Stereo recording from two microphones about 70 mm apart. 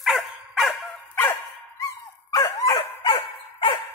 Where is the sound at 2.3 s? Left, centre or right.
Left.